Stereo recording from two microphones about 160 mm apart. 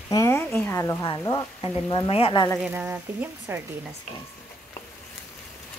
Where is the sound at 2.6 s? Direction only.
10° right (ahead or behind).